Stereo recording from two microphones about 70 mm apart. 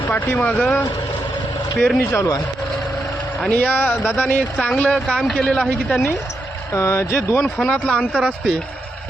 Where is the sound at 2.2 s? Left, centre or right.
Left.